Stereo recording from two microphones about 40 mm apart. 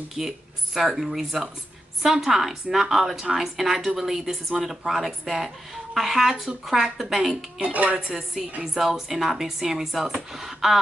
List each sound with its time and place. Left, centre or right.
0.2 s a woman's voice: centre
7.6 s speech: right
8.1 s a woman's voice: centre